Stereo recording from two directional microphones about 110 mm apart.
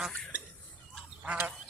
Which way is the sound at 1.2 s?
10° right (ahead or behind).